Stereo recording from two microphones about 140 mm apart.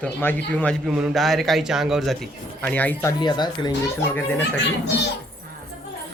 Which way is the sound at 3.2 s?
30° left (ahead or behind).